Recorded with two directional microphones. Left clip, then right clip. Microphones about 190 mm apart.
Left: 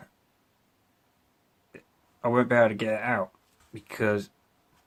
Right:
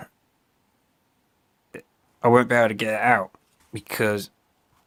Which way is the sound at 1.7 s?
50° right (ahead or behind).